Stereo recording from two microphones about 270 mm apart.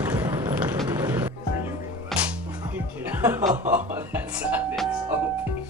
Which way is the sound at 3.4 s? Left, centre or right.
Right.